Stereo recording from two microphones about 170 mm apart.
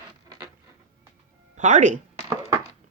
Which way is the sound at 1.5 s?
45° right (ahead or behind).